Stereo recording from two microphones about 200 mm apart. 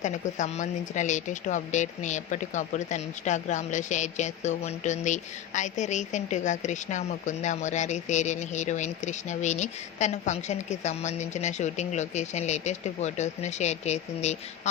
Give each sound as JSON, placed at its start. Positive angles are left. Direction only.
{"t": 0.0, "sound": "a woman's voice", "side_deg": 35}